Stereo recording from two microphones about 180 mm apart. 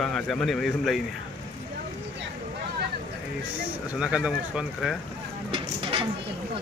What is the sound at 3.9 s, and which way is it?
Speech, 5° right (ahead or behind).